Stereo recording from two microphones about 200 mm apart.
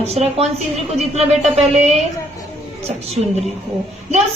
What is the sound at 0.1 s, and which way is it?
Speech, 30° right (ahead or behind).